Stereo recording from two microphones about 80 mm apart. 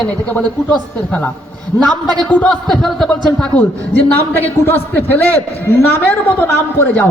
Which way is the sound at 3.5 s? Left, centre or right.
Left.